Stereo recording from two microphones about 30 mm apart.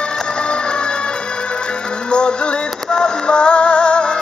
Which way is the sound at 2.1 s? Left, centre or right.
Left.